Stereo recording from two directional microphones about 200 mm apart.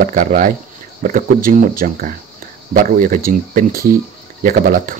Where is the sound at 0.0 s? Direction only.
40° right (ahead or behind).